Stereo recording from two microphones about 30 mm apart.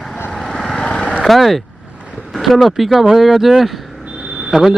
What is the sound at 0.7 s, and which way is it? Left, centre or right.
Vehicle, left.